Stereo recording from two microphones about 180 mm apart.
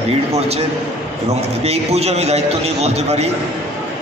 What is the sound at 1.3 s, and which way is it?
A man's voice, 35° right (ahead or behind).